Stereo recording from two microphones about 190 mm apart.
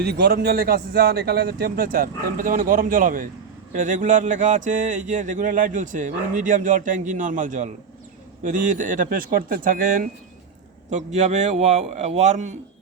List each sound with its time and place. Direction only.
0.0 s a man's voice: 55° right (ahead or behind); by 12.5 s 35° right (ahead or behind)